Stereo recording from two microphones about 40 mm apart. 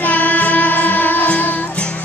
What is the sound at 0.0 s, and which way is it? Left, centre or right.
Music, left.